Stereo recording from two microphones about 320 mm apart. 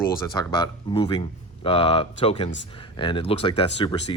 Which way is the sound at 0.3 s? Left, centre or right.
Centre.